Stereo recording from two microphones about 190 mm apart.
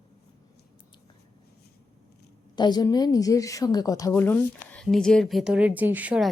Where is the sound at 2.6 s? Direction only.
20° left (ahead or behind).